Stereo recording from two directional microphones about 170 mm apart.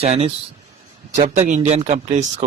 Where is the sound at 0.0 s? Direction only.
40° right (ahead or behind).